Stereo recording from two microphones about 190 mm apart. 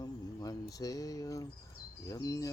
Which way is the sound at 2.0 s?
15° left (ahead or behind).